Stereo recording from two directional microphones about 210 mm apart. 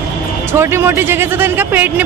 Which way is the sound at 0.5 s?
10° right (ahead or behind).